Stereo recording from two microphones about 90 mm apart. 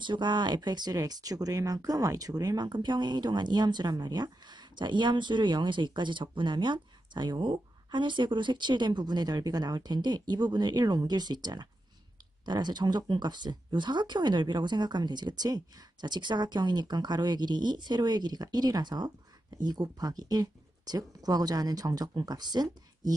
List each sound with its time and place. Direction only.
0.0 s speech: 60° right (ahead or behind)